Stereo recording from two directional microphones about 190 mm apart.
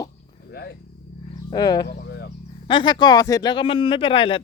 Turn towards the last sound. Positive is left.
turn(degrees=25)  # may be behind; listen again after turning